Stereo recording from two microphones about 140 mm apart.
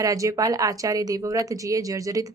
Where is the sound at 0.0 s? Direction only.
25° right (ahead or behind).